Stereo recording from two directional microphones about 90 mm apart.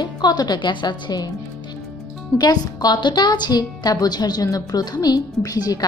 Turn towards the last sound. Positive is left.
turn(degrees=45)  # may be behind; listen again after turning